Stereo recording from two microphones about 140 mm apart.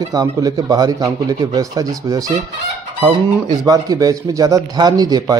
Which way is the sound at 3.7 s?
25° right (ahead or behind).